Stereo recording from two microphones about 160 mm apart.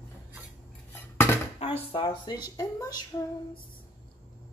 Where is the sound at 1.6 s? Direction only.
35° left (ahead or behind); by 3.2 s 20° left (ahead or behind).